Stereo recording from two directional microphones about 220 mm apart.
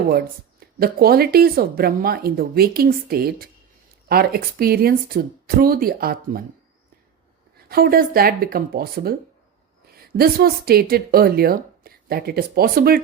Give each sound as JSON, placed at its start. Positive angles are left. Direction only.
{"t": 0.8, "sound": "speech", "side_deg": -45}
{"t": 7.7, "sound": "a woman's voice", "side_deg": -40}